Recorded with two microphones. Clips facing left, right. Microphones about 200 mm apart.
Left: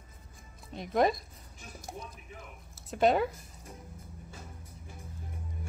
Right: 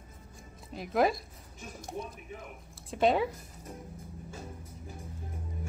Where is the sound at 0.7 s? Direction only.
5° right (ahead or behind).